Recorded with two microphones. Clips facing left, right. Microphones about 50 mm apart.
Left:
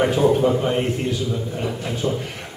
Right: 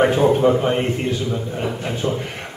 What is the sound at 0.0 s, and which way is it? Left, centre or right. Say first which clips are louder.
A man's voice: right 2 dB; right.